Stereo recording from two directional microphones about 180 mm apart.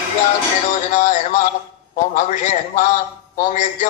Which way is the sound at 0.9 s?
45° left (ahead or behind).